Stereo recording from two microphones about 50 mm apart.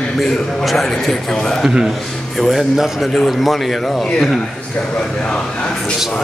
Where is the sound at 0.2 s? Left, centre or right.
Centre.